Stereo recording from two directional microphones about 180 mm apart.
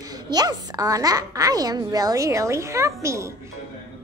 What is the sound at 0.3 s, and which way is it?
Speech, 20° right (ahead or behind).